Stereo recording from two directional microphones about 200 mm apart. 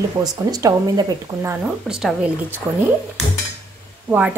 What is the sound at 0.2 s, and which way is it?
Speech, 15° right (ahead or behind).